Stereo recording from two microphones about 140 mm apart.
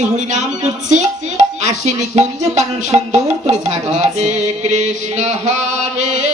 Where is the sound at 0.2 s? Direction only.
60° right (ahead or behind).